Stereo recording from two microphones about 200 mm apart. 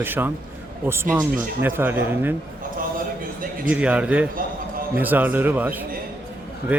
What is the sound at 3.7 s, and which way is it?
A man's voice, 5° right (ahead or behind).